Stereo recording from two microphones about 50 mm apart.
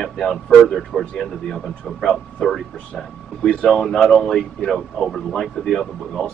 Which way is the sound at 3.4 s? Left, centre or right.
Centre.